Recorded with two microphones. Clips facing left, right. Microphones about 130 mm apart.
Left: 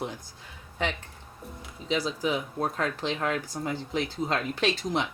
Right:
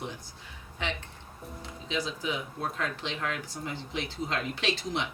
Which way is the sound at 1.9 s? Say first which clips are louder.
Left 5 dB; 35° left (ahead or behind).